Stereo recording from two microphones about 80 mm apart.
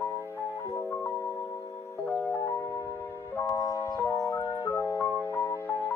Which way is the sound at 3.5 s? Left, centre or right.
Left.